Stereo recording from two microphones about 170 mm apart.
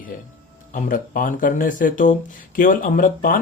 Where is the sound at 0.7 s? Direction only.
55° left (ahead or behind).